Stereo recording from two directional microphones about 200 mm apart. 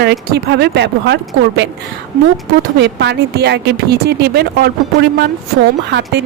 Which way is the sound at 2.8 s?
55° right (ahead or behind).